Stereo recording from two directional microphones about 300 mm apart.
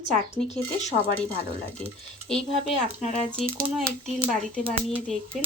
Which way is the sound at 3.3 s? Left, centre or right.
Centre.